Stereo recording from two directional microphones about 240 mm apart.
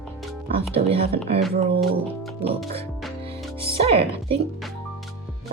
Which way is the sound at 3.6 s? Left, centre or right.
Right.